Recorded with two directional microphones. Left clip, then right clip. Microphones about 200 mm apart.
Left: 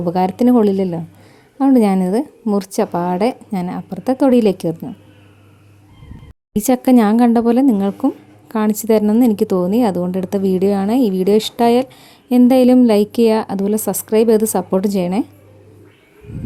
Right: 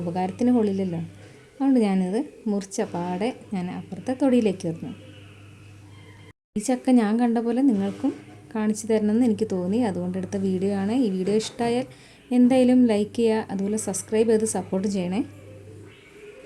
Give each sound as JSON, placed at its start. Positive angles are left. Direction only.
{"t": 0.0, "sound": "speech", "side_deg": 40}
{"t": 6.5, "sound": "speech", "side_deg": 40}